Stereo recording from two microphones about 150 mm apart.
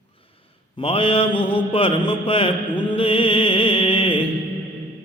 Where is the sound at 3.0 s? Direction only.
35° left (ahead or behind).